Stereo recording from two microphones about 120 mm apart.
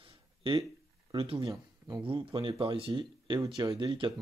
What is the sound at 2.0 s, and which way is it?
Speech, 45° right (ahead or behind).